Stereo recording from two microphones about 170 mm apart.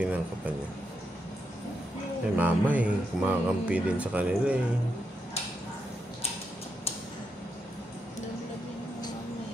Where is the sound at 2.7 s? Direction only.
10° right (ahead or behind).